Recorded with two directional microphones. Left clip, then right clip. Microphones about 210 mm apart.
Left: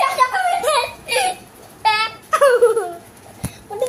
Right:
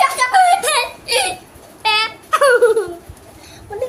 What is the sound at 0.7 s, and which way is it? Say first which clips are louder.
Whimper: even; 30° right (ahead or behind).